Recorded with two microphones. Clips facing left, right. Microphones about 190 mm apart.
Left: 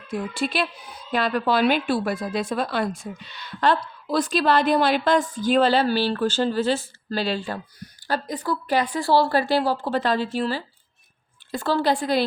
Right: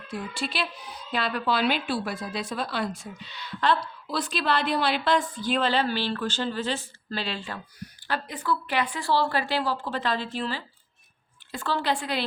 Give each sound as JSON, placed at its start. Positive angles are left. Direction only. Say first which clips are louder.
{"t": 0.1, "sound": "a woman's voice", "louder": "left 6 dB", "side_deg": 50}